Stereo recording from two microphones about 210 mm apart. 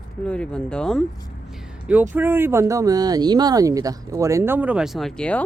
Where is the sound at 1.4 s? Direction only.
Centre (ahead or behind).